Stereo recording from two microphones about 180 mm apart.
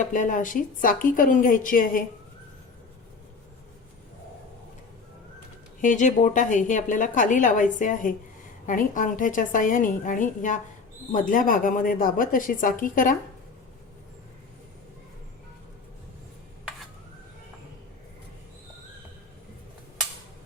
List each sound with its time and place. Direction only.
0.0 s a woman's voice: 45° left (ahead or behind)
5.8 s a woman's voice: 45° left (ahead or behind)